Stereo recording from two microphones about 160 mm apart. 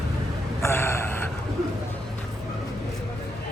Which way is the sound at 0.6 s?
15° left (ahead or behind).